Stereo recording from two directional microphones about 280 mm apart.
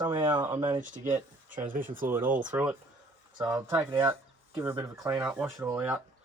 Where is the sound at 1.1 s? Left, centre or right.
Centre.